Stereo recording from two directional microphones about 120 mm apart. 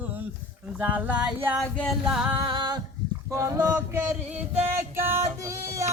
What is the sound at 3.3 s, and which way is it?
Music, 25° right (ahead or behind).